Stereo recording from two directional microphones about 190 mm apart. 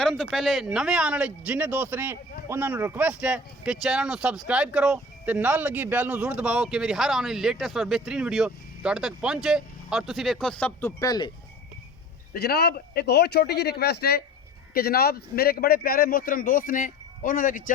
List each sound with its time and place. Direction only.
0.0 s speech: centre (ahead or behind); by 11.3 s 20° left (ahead or behind)
12.3 s a man's voice: 55° left (ahead or behind)